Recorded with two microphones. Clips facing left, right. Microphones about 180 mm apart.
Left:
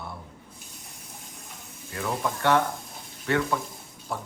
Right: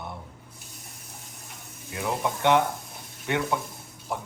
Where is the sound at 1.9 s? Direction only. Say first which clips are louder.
Right 1 dB; 15° right (ahead or behind).